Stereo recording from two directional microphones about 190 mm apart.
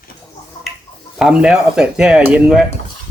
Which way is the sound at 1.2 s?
5° right (ahead or behind).